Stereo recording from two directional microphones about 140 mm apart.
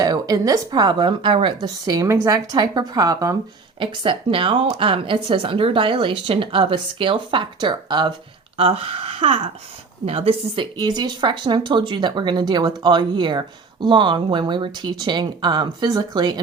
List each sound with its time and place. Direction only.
0.0 s speech: 25° right (ahead or behind)
3.8 s speech: 35° right (ahead or behind)